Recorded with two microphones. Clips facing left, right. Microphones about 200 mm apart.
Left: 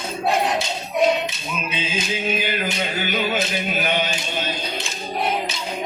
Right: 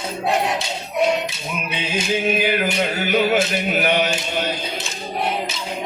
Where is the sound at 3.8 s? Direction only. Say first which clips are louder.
Right 4 dB; 65° right (ahead or behind).